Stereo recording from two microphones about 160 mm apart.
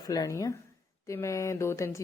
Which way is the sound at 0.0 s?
20° left (ahead or behind).